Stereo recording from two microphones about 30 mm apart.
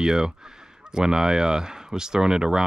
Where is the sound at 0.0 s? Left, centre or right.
Centre.